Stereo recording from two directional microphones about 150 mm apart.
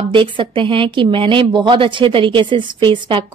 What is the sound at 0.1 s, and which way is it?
A woman's voice, 35° right (ahead or behind).